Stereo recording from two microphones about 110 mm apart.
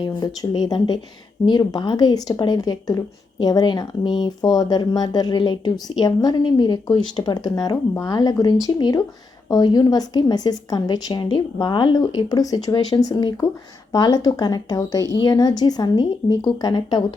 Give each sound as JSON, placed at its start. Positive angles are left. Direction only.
{"t": 0.0, "sound": "a woman's voice", "side_deg": 40}